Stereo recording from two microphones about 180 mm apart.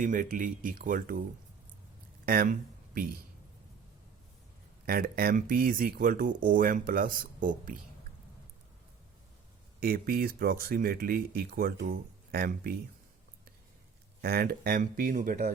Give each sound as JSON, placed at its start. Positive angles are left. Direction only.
{"t": 0.0, "sound": "speech", "side_deg": -45}
{"t": 2.2, "sound": "a sound", "side_deg": -55}
{"t": 4.9, "sound": "speech", "side_deg": -55}
{"t": 9.8, "sound": "speech", "side_deg": -55}
{"t": 14.2, "sound": "speech", "side_deg": -60}